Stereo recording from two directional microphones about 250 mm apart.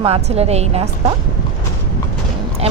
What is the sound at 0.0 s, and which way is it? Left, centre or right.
Speech, right.